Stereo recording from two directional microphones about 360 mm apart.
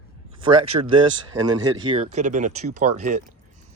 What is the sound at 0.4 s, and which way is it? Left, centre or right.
Speech, centre.